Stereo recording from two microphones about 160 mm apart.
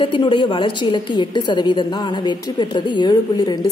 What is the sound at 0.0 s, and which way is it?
A woman's voice, 30° left (ahead or behind).